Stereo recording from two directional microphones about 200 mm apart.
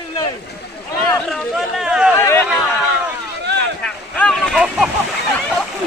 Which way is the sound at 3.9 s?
5° left (ahead or behind).